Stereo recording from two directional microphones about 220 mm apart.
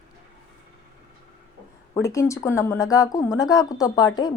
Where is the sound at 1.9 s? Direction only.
15° left (ahead or behind).